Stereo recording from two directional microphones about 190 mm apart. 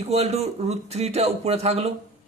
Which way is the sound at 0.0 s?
35° right (ahead or behind).